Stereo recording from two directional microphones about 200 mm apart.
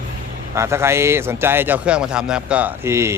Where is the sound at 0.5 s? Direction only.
15° right (ahead or behind).